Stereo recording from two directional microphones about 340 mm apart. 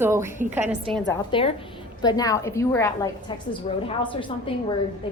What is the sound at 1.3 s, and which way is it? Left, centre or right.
A woman's voice, centre.